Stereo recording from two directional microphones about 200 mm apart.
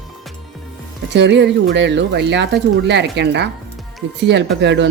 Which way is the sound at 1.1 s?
60° right (ahead or behind).